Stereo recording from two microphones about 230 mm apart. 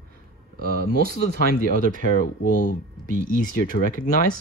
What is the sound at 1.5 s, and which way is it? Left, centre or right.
Speech, left.